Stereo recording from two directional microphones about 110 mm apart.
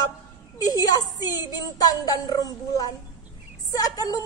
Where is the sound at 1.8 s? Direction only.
35° left (ahead or behind).